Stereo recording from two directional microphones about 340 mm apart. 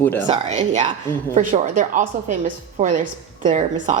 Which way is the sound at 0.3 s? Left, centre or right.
Centre.